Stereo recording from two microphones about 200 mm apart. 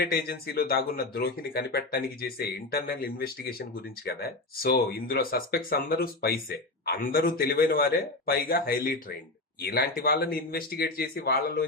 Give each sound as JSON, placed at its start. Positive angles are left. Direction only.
{"t": 0.0, "sound": "speech", "side_deg": 50}